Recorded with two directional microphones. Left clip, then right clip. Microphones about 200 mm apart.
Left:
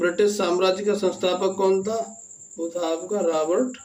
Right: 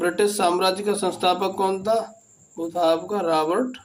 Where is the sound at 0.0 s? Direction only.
30° right (ahead or behind).